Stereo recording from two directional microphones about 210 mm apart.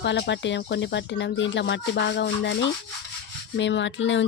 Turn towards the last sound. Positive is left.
turn(degrees=60)  # may be behind; listen again after turning